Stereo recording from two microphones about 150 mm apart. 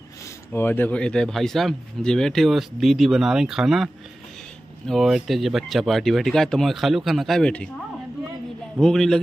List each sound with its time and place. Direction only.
0.5 s speech: 15° left (ahead or behind)
8.7 s speech: 5° left (ahead or behind)